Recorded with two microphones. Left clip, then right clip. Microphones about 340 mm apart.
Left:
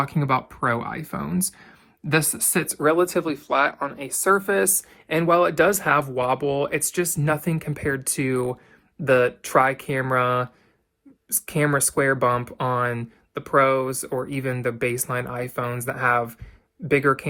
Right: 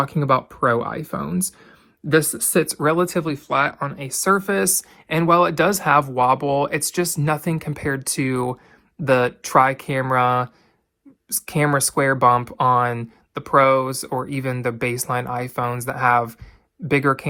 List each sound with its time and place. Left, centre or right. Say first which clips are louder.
0.0 s speech: right 4 dB; centre
2.6 s speech: even; centre